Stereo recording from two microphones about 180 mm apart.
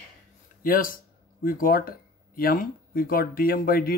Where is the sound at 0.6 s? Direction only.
50° left (ahead or behind).